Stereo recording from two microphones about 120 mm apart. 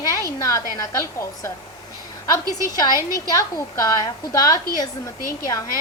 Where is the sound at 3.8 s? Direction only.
30° left (ahead or behind).